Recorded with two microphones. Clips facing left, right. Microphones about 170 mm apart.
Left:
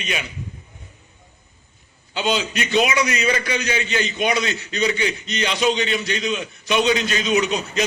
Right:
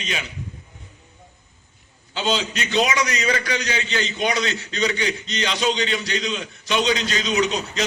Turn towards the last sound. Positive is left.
turn(degrees=15)  # may be behind; listen again after turning